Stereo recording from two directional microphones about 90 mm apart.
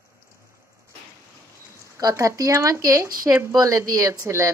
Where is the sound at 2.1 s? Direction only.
35° right (ahead or behind).